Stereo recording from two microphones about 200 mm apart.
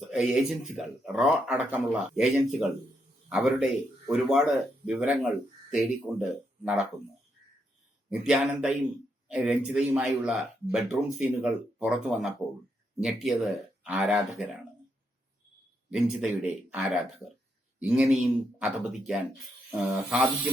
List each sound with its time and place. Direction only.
0.1 s speech: centre (ahead or behind)
8.1 s speech: 5° right (ahead or behind)
15.9 s speech: 5° right (ahead or behind)